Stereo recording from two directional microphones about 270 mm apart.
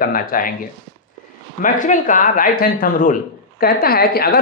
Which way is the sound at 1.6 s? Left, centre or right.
Left.